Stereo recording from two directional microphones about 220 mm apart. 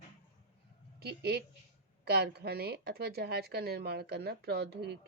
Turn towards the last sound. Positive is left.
turn(degrees=-50)  # may be behind; listen again after turning